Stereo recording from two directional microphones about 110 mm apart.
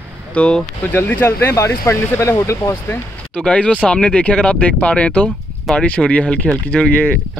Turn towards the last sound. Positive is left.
turn(degrees=10)  # may be behind; listen again after turning